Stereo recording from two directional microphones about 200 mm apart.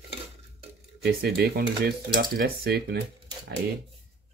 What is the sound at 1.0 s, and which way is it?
Cutlery, 50° right (ahead or behind).